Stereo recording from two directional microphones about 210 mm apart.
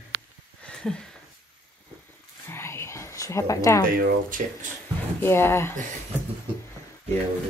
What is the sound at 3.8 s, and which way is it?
Speech, 45° right (ahead or behind).